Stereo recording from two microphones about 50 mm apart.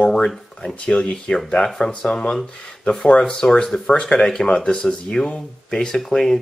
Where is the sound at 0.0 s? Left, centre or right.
Centre.